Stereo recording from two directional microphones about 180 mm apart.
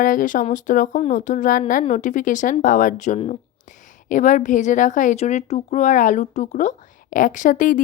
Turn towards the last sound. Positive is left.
turn(degrees=45)  # may be behind; listen again after turning